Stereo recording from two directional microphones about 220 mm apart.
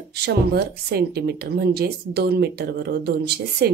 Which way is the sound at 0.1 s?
50° right (ahead or behind).